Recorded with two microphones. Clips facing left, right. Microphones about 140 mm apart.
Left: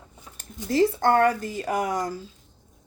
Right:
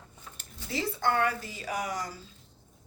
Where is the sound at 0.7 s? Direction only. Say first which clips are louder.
Left 9 dB; 50° left (ahead or behind).